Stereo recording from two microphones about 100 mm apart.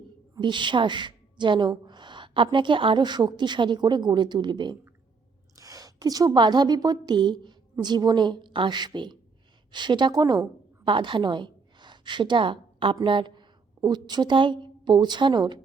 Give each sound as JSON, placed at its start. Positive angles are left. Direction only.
{"t": 0.3, "sound": "a woman's voice", "side_deg": -50}
{"t": 5.5, "sound": "a woman's voice", "side_deg": -35}
{"t": 10.8, "sound": "a woman's voice", "side_deg": -55}